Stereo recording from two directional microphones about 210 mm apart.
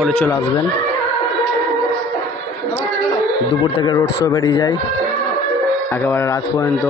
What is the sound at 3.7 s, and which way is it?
Speech, 20° left (ahead or behind).